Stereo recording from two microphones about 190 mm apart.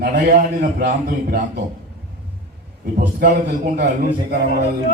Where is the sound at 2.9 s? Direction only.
45° right (ahead or behind).